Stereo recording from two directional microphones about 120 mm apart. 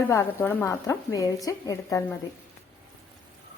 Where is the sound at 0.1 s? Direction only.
20° left (ahead or behind).